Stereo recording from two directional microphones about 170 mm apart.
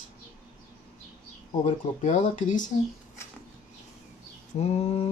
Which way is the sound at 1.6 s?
45° left (ahead or behind).